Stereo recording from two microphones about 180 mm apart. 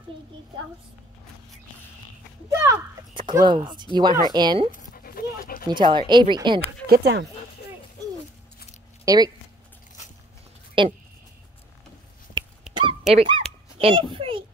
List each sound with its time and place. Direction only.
2.6 s speech: 20° right (ahead or behind)
4.6 s dog: 50° left (ahead or behind)
5.7 s speech: 25° right (ahead or behind)
6.9 s speech: 70° right (ahead or behind)
9.0 s speech: 20° right (ahead or behind)
10.8 s speech: 30° right (ahead or behind)
13.0 s a child's voice: 30° right (ahead or behind)